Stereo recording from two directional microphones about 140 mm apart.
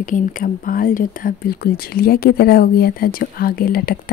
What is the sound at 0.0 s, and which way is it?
Speech, 70° left (ahead or behind).